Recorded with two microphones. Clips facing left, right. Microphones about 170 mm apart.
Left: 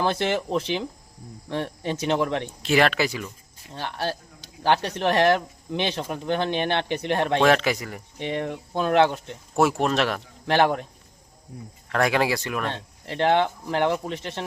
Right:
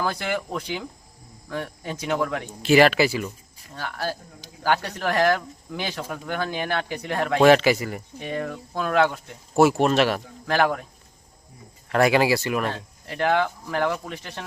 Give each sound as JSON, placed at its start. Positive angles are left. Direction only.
{"t": 0.0, "sound": "speech", "side_deg": 25}
{"t": 2.6, "sound": "speech", "side_deg": -5}
{"t": 3.8, "sound": "speech", "side_deg": 25}
{"t": 7.4, "sound": "speech", "side_deg": -5}
{"t": 8.2, "sound": "speech", "side_deg": 25}
{"t": 9.6, "sound": "speech", "side_deg": -5}
{"t": 10.4, "sound": "speech", "side_deg": 25}
{"t": 11.9, "sound": "speech", "side_deg": -5}
{"t": 12.7, "sound": "speech", "side_deg": 25}